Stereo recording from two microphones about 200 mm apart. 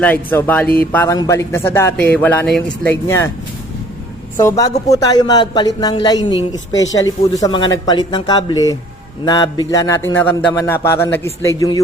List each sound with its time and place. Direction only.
0.0 s a man's voice: 10° left (ahead or behind)
4.4 s a man's voice: 15° left (ahead or behind)